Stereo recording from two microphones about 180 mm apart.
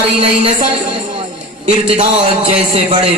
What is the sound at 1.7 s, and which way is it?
Speech, 30° right (ahead or behind).